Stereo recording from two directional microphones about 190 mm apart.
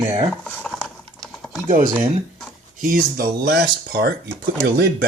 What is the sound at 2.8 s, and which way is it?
Speech, 45° right (ahead or behind).